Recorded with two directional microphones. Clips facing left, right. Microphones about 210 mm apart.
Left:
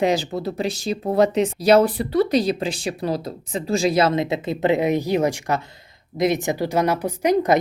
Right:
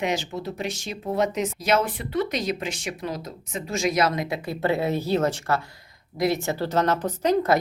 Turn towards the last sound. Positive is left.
turn(degrees=15)  # may be behind; listen again after turning